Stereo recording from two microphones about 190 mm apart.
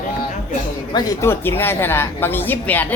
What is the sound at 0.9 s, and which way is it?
A woman's voice, 20° left (ahead or behind).